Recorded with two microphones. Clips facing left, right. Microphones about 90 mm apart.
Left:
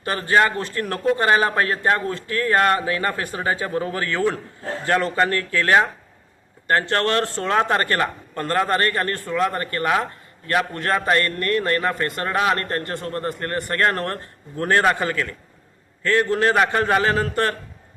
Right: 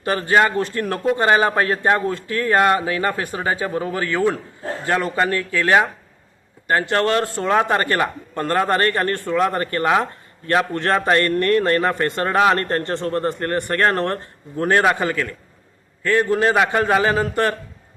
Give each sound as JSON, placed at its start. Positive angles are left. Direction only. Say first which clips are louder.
{"t": 0.0, "sound": "a man's voice", "louder": "right 2 dB", "side_deg": -25}